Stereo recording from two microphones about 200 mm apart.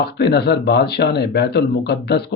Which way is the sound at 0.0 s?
55° left (ahead or behind).